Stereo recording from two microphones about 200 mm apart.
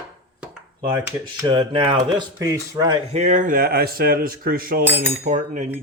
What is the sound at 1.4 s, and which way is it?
Speech, 20° right (ahead or behind).